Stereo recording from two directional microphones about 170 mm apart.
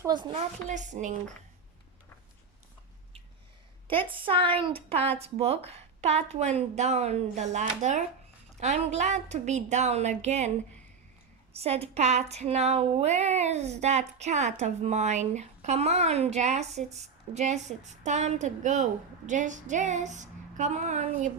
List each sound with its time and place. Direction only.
0.0 s speech: 25° right (ahead or behind)
0.7 s speech: 45° right (ahead or behind)
3.8 s speech: 30° right (ahead or behind)
11.5 s speech: 35° right (ahead or behind)